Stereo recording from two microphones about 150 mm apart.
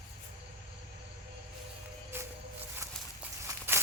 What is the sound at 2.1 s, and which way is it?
Music, 15° right (ahead or behind).